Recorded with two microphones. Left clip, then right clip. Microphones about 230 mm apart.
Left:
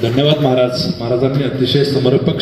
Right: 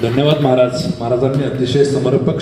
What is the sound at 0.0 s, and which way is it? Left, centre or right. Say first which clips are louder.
A man's voice: even; left.